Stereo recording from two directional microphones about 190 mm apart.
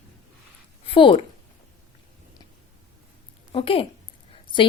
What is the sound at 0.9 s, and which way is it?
Speech, 25° left (ahead or behind).